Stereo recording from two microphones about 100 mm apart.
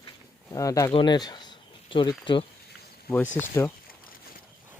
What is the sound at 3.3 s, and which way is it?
Speech, 25° left (ahead or behind).